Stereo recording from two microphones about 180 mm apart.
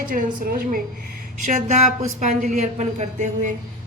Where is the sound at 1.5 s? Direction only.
40° right (ahead or behind).